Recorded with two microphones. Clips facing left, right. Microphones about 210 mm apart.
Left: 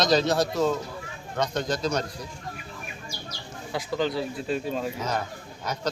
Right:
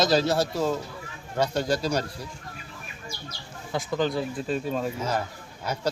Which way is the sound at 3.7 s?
45° right (ahead or behind).